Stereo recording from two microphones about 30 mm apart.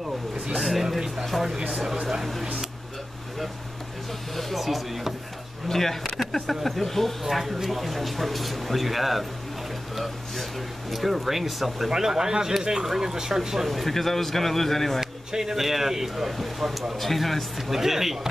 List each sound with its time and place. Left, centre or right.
0.6 s a sound: centre
0.8 s a sound: centre
1.2 s speech: centre
4.6 s speech: centre
5.7 s a man's voice: centre
7.2 s speech: centre
10.9 s speech: centre
11.9 s speech: centre
13.7 s a man's voice: centre
15.0 s speech: centre